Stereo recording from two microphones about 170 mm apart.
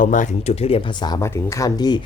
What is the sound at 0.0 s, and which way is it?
Speech, 50° left (ahead or behind).